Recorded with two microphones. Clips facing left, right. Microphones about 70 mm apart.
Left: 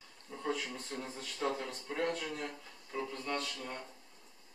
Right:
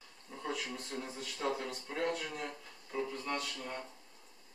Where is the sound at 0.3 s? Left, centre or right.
Centre.